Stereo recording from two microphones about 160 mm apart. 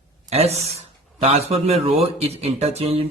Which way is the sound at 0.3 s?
40° right (ahead or behind).